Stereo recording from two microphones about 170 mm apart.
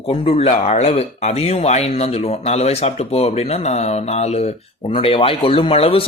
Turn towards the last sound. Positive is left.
turn(degrees=35)  # may be behind; listen again after turning